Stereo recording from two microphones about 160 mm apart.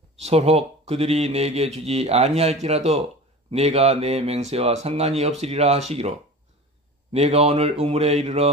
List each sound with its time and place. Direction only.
0.2 s speech: 40° right (ahead or behind)